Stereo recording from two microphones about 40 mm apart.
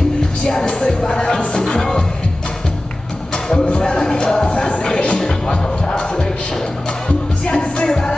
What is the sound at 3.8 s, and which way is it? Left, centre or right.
Music, centre.